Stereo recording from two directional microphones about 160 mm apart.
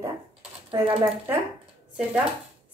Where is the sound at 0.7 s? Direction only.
30° right (ahead or behind).